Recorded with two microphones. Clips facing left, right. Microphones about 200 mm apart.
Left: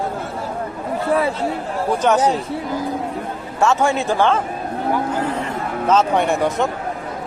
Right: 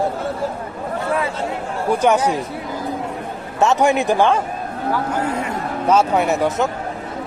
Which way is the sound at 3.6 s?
20° right (ahead or behind).